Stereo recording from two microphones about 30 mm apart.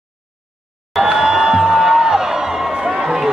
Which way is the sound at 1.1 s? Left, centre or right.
Right.